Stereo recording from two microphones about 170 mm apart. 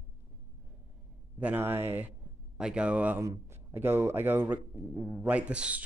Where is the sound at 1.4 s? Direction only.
10° right (ahead or behind).